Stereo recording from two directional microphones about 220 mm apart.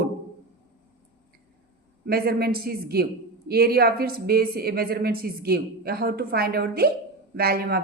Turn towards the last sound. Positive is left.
turn(degrees=-45)  # may be behind; listen again after turning